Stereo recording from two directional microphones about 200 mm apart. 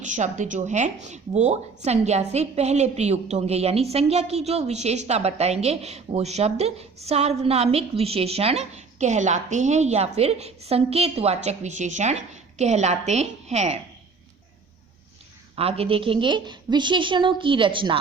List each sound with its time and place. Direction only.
0.0 s a woman's voice: 40° right (ahead or behind)
15.5 s a woman's voice: 30° right (ahead or behind)